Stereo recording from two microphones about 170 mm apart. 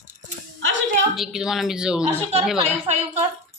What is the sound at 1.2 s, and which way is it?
Speech, 5° right (ahead or behind).